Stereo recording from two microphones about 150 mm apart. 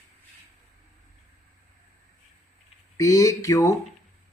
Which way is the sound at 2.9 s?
20° left (ahead or behind).